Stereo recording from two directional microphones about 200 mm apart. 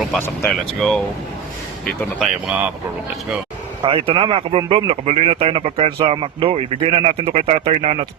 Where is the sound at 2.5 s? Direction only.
5° right (ahead or behind).